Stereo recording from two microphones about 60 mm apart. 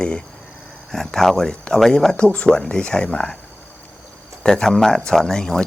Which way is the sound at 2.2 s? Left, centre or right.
Centre.